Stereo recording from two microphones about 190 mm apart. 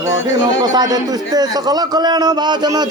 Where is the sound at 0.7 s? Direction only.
20° right (ahead or behind).